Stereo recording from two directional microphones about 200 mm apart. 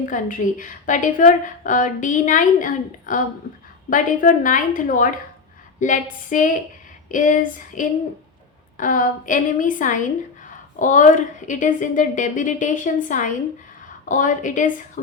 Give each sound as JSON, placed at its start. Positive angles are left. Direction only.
{"t": 0.0, "sound": "a woman's voice", "side_deg": 40}